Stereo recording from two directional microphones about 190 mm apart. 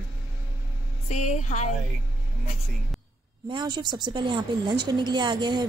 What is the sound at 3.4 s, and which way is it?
A woman's voice, 25° right (ahead or behind).